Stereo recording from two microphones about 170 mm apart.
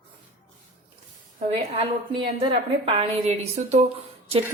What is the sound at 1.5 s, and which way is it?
Speech, 30° right (ahead or behind).